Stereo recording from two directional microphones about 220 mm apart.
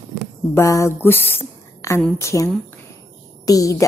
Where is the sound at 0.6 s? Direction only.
15° left (ahead or behind).